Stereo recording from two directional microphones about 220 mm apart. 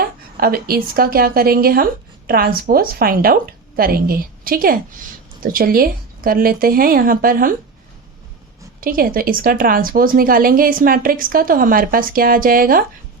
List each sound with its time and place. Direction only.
0.3 s speech: 40° right (ahead or behind)
8.8 s speech: 40° right (ahead or behind)